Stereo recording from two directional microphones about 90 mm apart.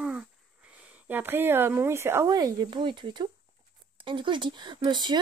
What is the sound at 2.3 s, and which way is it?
Speech, 50° right (ahead or behind).